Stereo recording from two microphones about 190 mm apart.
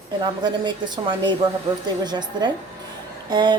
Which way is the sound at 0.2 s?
20° right (ahead or behind).